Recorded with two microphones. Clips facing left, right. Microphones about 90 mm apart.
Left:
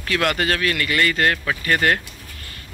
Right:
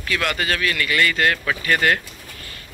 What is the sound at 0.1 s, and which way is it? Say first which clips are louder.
Speech: left 2 dB; 50° left (ahead or behind).